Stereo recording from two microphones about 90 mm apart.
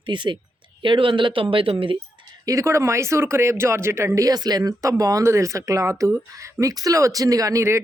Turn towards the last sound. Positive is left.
turn(degrees=-35)  # may be behind; listen again after turning